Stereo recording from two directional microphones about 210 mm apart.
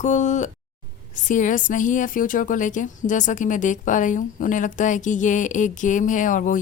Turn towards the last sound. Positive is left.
turn(degrees=40)  # may be behind; listen again after turning